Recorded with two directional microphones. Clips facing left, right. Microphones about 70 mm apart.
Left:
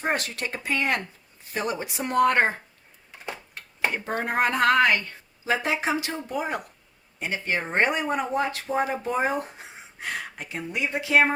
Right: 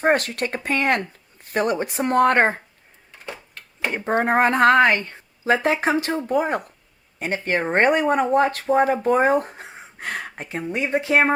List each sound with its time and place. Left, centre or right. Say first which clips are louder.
0.0 s speech: right 8 dB; right
3.9 s speech: right 9 dB; right
5.6 s speech: right 6 dB; right